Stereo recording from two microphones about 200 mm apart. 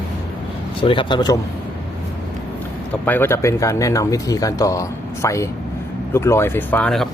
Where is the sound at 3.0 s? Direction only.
10° left (ahead or behind).